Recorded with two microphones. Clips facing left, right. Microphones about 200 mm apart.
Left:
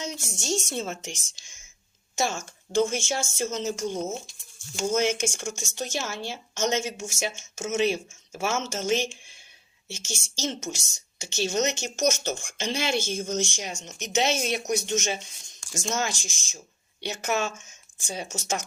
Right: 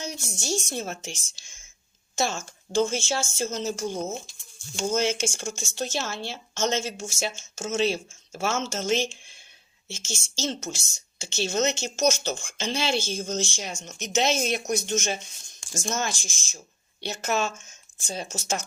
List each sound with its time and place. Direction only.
0.0 s a woman's voice: 20° left (ahead or behind)
11.9 s speech: 65° left (ahead or behind)
12.9 s a woman's voice: 15° left (ahead or behind)